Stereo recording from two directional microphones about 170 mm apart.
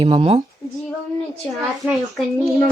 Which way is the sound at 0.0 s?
30° right (ahead or behind).